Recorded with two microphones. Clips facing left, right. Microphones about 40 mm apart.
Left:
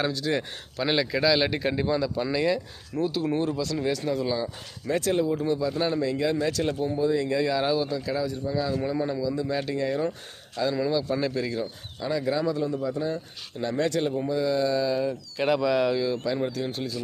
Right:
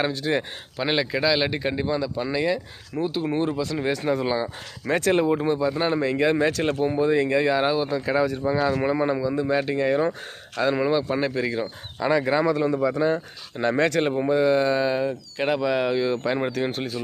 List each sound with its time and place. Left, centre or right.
0.0 s speech: right
0.8 s speech: centre
3.8 s speech: right
4.9 s speech: right
5.4 s speech: right
7.9 s speech: right
11.9 s speech: right
15.4 s speech: centre
16.1 s speech: right